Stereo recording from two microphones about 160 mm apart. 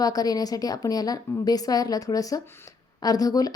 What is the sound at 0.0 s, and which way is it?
A woman's voice, 25° left (ahead or behind).